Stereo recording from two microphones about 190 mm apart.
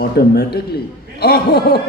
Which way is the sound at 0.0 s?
55° left (ahead or behind).